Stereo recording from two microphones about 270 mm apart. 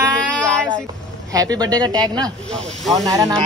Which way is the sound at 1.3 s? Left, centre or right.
Centre.